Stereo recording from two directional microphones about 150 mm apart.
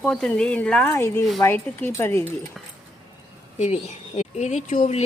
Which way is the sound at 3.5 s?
50° left (ahead or behind).